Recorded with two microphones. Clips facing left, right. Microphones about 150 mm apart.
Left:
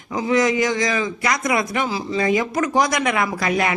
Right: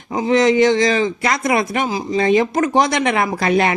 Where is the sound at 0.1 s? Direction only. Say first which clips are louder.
Right 4 dB; 25° right (ahead or behind).